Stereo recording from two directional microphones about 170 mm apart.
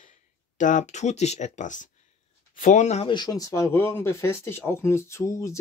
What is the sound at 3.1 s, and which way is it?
Speech, 25° left (ahead or behind).